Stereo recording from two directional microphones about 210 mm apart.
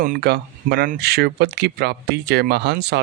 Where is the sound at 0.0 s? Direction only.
45° right (ahead or behind).